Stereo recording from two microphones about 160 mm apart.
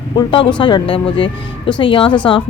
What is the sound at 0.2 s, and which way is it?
Speech, 30° left (ahead or behind).